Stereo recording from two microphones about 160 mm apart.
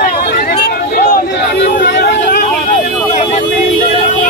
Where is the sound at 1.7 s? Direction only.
90° left.